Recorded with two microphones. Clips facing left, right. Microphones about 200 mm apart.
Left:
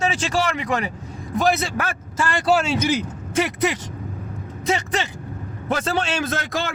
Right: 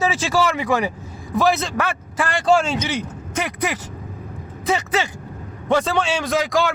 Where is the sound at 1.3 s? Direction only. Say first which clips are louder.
Right 2 dB; centre (ahead or behind).